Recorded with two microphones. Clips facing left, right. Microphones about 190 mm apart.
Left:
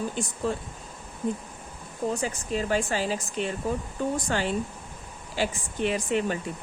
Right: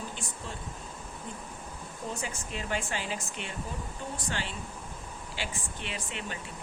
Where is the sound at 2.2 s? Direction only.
35° left (ahead or behind).